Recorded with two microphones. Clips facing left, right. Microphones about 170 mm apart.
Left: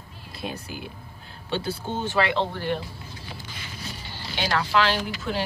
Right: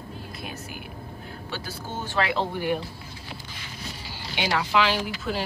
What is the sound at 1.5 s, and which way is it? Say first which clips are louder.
Speech: left 8 dB; 25° left (ahead or behind).